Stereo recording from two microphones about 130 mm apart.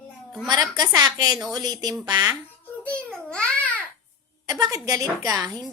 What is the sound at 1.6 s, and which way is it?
Speech, 30° right (ahead or behind).